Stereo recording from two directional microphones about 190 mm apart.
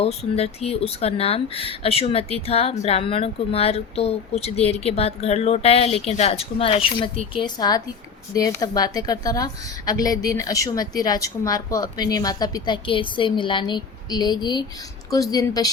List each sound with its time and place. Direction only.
0.0 s a woman's voice: 35° left (ahead or behind)